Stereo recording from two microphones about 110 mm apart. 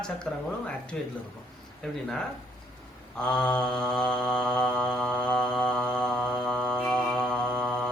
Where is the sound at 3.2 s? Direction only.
5° left (ahead or behind).